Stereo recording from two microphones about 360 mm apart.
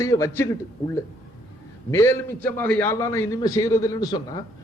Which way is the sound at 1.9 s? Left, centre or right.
Centre.